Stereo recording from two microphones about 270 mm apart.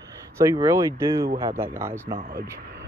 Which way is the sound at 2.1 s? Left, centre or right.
Right.